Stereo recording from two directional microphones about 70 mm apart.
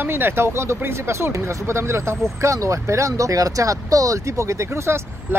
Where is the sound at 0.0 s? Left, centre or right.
Right.